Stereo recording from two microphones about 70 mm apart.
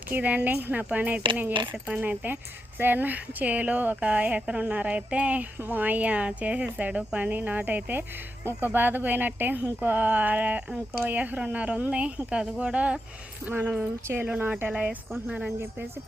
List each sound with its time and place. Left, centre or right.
0.1 s speech: right